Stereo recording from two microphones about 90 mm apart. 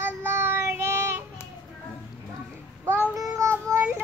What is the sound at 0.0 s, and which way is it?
Child singing, 25° right (ahead or behind).